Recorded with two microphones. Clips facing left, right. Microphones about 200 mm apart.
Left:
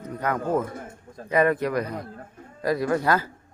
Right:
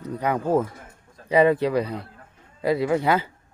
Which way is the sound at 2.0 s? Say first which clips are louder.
Left 8 dB; 45° left (ahead or behind).